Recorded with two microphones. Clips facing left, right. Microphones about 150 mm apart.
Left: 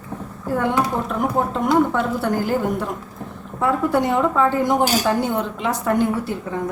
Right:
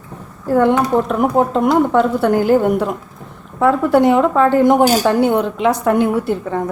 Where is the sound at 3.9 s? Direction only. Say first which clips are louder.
Right 7 dB; 75° right (ahead or behind).